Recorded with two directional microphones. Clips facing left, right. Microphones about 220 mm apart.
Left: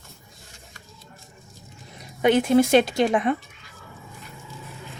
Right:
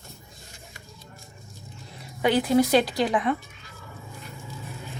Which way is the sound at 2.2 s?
20° left (ahead or behind).